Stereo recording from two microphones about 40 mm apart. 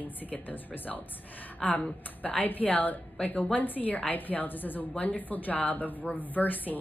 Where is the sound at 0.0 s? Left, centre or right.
Left.